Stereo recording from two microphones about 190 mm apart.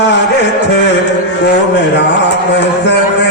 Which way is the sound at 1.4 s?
65° left (ahead or behind).